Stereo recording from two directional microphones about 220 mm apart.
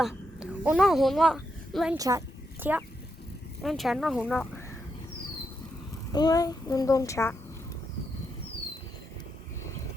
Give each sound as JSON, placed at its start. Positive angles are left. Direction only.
{"t": 0.0, "sound": "a child's voice", "side_deg": -5}
{"t": 2.0, "sound": "speech", "side_deg": -15}
{"t": 6.1, "sound": "a woman's voice", "side_deg": 15}